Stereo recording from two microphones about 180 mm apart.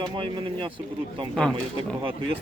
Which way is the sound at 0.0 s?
30° right (ahead or behind).